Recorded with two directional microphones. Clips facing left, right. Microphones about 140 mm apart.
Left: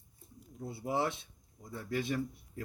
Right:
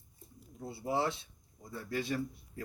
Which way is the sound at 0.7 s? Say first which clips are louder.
Even; 15° left (ahead or behind).